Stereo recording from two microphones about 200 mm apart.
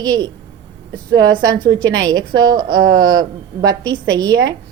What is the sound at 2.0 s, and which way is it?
A woman's voice, 20° right (ahead or behind).